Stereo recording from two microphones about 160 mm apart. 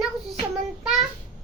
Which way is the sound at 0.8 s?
Centre (ahead or behind).